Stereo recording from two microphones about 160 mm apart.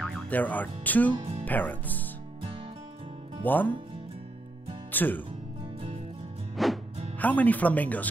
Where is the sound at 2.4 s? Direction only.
35° right (ahead or behind).